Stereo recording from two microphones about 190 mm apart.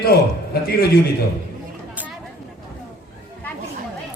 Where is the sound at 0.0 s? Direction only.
55° left (ahead or behind).